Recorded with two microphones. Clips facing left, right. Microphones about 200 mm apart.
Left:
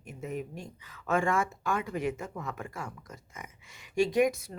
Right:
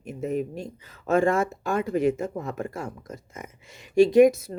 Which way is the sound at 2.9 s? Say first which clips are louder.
Right 8 dB; 25° right (ahead or behind).